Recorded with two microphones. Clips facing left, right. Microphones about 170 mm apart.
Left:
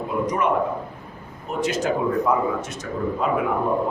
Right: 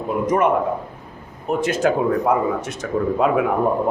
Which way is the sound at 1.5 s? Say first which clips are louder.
Right 4 dB; 55° right (ahead or behind).